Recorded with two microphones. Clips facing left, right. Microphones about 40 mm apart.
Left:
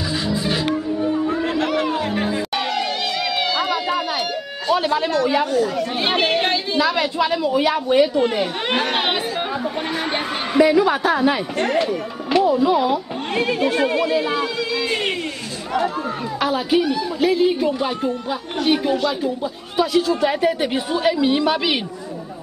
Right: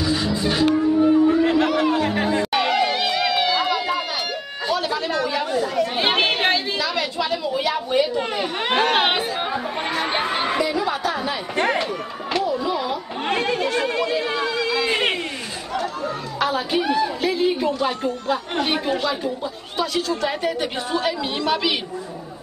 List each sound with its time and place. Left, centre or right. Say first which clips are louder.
0.0 s music: right 1 dB; centre
4.7 s a sound: left 5 dB; left
5.6 s chatter: left 1 dB; centre
6.8 s a woman's voice: left 5 dB; centre
8.2 s speech: left 4 dB; centre
10.6 s a woman's voice: left 7 dB; centre
11.5 s speech: left 1 dB; centre
12.5 s speech: left 6 dB; centre
13.3 s speech: left 2 dB; centre
16.3 s speech: left 3 dB; centre
16.8 s speech: right 1 dB; centre
17.2 s speech: left 3 dB; centre
18.6 s speech: left 8 dB; centre